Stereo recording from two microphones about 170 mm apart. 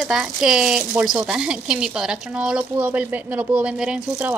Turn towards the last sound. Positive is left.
turn(degrees=-5)  # may be behind; listen again after turning